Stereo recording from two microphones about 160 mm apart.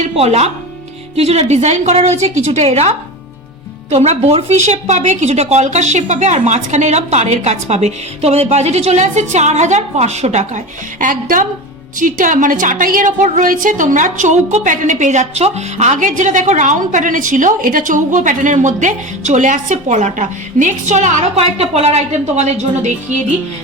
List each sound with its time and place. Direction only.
0.0 s a woman's voice: 40° right (ahead or behind)
3.9 s a woman's voice: 40° right (ahead or behind)
11.0 s a woman's voice: 55° right (ahead or behind)